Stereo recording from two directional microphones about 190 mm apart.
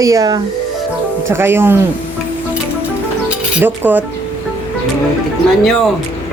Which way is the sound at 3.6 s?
10° right (ahead or behind).